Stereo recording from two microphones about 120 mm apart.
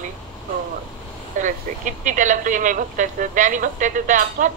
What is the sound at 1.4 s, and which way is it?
Speech, 90° right.